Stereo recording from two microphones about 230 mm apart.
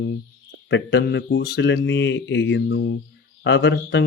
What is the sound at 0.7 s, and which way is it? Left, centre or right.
Speech, left.